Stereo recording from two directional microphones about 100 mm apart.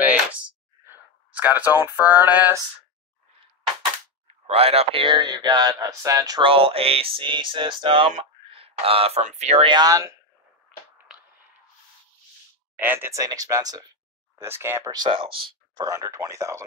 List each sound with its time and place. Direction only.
0.0 s a sound: 15° right (ahead or behind)
4.5 s a sound: 80° right
5.0 s speech: 45° right (ahead or behind)
6.4 s a sound: 70° right (ahead or behind); by 9.7 s 90° right
9.7 s speech: 40° right (ahead or behind)
12.7 s speech: 20° right (ahead or behind)
13.1 s speech: 35° right (ahead or behind)
14.3 s speech: 25° right (ahead or behind)
14.8 s speech: 40° right (ahead or behind)
15.0 s speech: 65° right (ahead or behind)
15.8 s speech: 35° right (ahead or behind)